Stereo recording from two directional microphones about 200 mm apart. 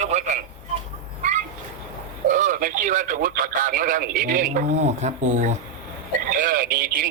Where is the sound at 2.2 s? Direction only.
40° right (ahead or behind).